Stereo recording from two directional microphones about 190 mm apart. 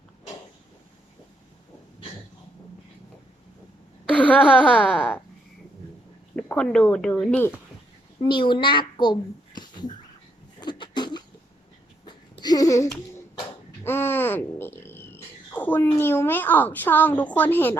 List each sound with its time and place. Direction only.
4.1 s a woman's voice: 5° left (ahead or behind)
6.3 s speech: 5° left (ahead or behind)
8.2 s a child's voice: 25° left (ahead or behind)
10.6 s a sound: 25° left (ahead or behind)
13.8 s speech: 10° left (ahead or behind)